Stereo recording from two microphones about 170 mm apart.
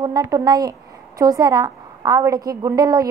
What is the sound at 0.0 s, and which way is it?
A woman's voice, 20° right (ahead or behind).